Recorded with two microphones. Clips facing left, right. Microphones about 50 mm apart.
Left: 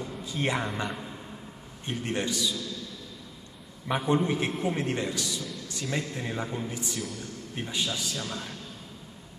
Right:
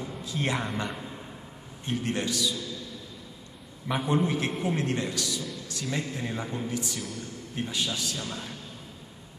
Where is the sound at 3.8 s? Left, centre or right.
Centre.